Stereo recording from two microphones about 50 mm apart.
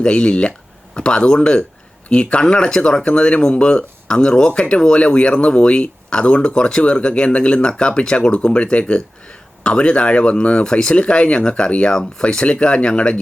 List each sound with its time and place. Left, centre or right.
0.0 s speech: centre